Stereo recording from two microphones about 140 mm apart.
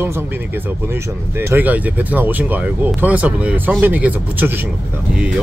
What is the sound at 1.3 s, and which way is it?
Speech, 15° right (ahead or behind).